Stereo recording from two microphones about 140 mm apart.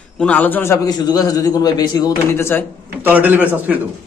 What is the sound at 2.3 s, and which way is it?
Speech, 15° left (ahead or behind).